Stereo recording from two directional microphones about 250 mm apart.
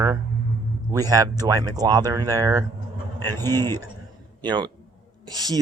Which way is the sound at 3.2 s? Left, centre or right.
Centre.